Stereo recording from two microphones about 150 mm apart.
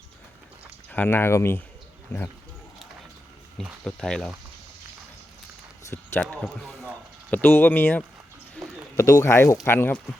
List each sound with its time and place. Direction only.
0.9 s speech: 10° left (ahead or behind)
3.6 s speech: 5° left (ahead or behind)
5.9 s speech: 10° left (ahead or behind)
8.6 s a sound: 10° left (ahead or behind)
9.0 s speech: 20° left (ahead or behind)